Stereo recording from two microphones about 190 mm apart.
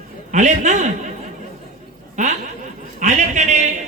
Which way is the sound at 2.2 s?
40° right (ahead or behind).